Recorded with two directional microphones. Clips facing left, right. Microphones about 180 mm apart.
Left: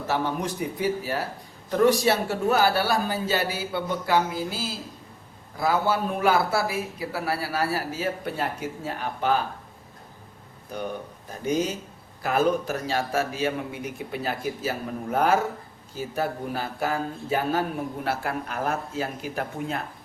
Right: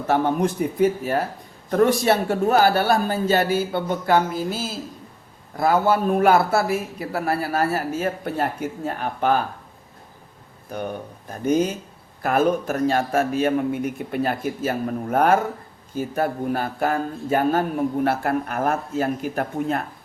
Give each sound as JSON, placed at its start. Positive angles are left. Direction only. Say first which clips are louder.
{"t": 0.1, "sound": "speech", "louder": "right 7 dB", "side_deg": -55}
{"t": 12.2, "sound": "speech", "louder": "right 3 dB", "side_deg": -50}